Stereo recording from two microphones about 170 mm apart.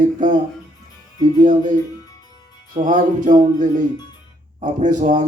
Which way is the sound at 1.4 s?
50° right (ahead or behind).